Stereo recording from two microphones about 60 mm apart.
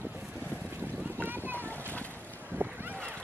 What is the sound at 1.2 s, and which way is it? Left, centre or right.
Boat, right.